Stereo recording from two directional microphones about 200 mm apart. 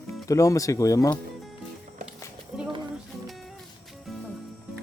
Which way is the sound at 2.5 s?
Centre (ahead or behind).